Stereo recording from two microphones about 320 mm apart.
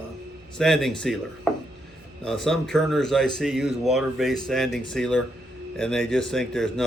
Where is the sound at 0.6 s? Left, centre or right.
Centre.